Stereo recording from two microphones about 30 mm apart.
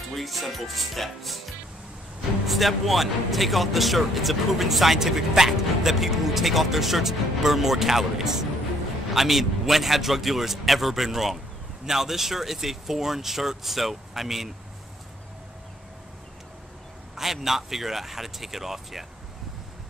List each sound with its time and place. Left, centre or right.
0.1 s speech: centre
17.1 s speech: centre